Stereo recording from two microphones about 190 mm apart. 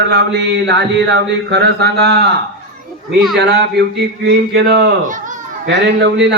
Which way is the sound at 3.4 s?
60° right (ahead or behind).